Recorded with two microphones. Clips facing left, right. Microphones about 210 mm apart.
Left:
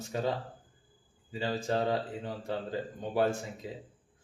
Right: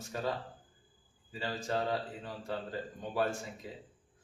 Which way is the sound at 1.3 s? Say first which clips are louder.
Left 4 dB; 25° left (ahead or behind).